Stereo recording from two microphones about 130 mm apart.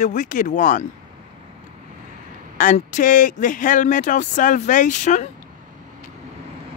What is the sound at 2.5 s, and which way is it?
Speech, 90° left.